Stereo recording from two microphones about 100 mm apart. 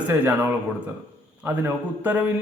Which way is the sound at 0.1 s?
20° right (ahead or behind).